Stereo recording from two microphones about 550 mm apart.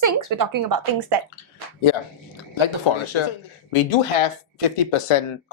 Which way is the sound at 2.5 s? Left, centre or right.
Left.